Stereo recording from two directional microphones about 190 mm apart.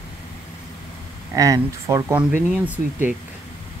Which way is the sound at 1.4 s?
15° right (ahead or behind).